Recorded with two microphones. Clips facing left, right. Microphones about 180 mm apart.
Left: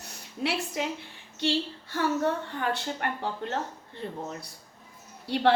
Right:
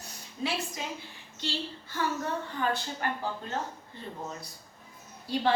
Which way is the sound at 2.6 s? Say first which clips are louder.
Even; 65° left (ahead or behind).